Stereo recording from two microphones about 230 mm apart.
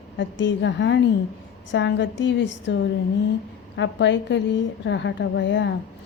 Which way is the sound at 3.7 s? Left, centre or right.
Left.